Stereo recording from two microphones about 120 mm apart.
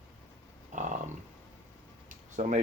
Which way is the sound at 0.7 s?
90° right.